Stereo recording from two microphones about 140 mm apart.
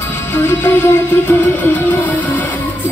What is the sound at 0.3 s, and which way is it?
Music, 15° left (ahead or behind).